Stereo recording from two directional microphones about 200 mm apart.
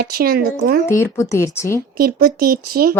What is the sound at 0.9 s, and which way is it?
Speech, 15° left (ahead or behind).